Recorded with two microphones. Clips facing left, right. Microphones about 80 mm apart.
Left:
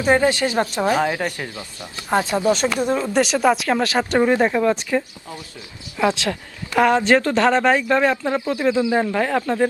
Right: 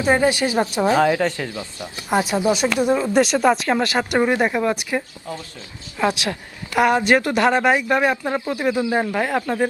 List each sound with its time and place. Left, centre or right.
0.1 s speech: centre
1.0 s speech: centre
2.1 s speech: centre